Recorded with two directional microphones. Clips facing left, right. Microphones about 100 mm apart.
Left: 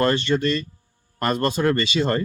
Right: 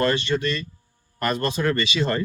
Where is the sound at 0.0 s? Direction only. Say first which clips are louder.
Left 2 dB; 35° left (ahead or behind).